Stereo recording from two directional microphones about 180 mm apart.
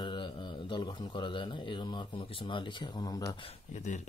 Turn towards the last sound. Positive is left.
turn(degrees=40)  # may be behind; listen again after turning